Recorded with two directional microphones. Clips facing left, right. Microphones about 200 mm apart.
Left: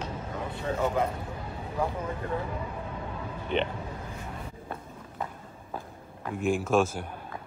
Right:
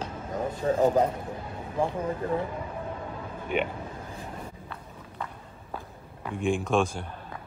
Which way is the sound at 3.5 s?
10° right (ahead or behind).